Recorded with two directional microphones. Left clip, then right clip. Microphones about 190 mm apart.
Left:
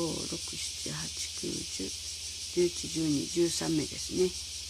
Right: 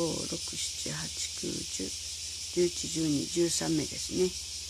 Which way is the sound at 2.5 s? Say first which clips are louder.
Even; 5° right (ahead or behind).